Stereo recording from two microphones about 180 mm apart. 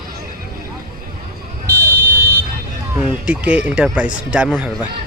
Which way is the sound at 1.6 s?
20° right (ahead or behind).